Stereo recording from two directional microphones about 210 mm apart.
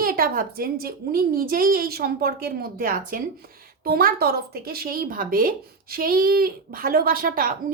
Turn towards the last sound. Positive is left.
turn(degrees=-40)  # may be behind; listen again after turning